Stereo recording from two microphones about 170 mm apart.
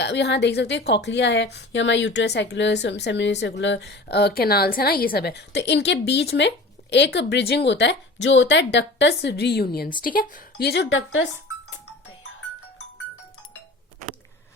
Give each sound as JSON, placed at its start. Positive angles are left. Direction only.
{"t": 0.0, "sound": "a woman's voice", "side_deg": 85}
{"t": 10.0, "sound": "speech", "side_deg": 55}
{"t": 10.7, "sound": "a woman's voice", "side_deg": 90}